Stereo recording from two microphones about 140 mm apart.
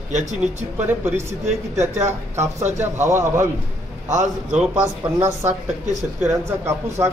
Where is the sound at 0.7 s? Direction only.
15° right (ahead or behind).